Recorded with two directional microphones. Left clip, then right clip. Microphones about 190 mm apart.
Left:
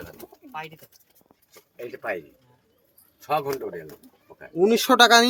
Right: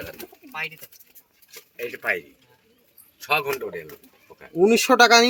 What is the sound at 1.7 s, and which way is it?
Speech, 45° left (ahead or behind).